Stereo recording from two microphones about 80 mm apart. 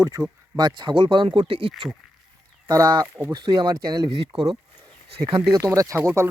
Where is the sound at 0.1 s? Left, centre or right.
Right.